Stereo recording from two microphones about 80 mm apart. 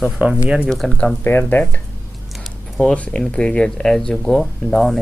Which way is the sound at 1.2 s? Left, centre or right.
Left.